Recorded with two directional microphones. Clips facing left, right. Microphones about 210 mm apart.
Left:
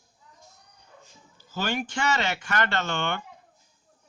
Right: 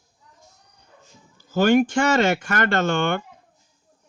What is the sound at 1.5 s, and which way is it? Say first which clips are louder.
Speech: right 13 dB; 50° right (ahead or behind).